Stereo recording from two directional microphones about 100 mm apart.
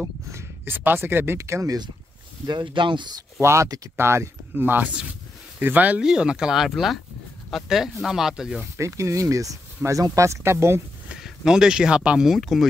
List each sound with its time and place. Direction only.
0.3 s speech: 20° right (ahead or behind)
2.4 s speech: 50° right (ahead or behind)
3.3 s speech: 30° right (ahead or behind); by 8.6 s 5° right (ahead or behind)
8.7 s speech: 30° right (ahead or behind)
11.1 s speech: 5° right (ahead or behind)